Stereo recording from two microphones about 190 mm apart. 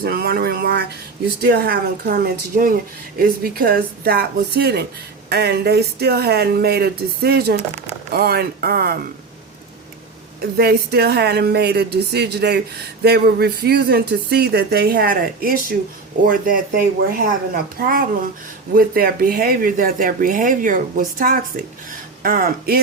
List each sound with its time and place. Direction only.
0.0 s speech: 55° right (ahead or behind)
10.4 s speech: 55° right (ahead or behind)